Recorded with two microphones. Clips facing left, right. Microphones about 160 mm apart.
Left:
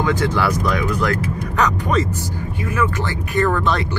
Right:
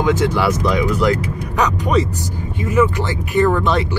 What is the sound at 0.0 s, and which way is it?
Speech, 20° right (ahead or behind).